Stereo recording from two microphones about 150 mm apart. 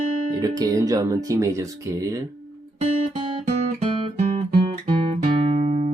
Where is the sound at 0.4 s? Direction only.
25° right (ahead or behind).